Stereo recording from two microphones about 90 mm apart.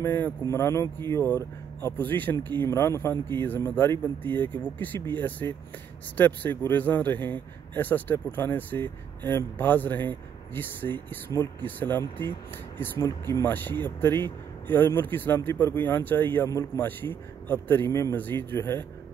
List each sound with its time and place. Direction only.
0.0 s speech: 20° left (ahead or behind)
5.4 s speech: 30° left (ahead or behind)
6.1 s speech: 20° left (ahead or behind)
17.8 s speech: 30° left (ahead or behind)
18.1 s speech: 20° left (ahead or behind)